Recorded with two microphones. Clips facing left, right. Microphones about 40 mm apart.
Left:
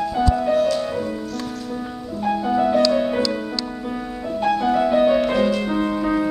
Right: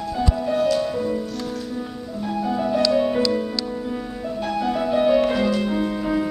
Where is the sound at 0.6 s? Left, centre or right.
Centre.